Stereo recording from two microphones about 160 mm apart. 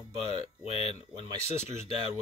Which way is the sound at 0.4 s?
40° left (ahead or behind).